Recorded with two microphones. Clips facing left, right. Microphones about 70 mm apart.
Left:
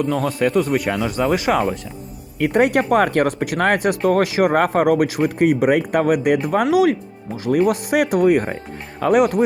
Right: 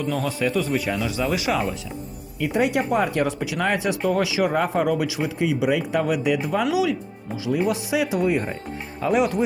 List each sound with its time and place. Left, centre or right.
0.0 s speech: left
2.4 s speech: left
4.4 s speech: left